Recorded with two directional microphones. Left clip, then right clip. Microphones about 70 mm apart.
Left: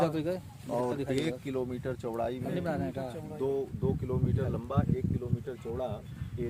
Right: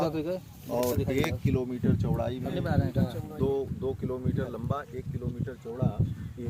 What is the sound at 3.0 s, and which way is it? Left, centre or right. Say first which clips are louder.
Speech: right 3 dB; centre.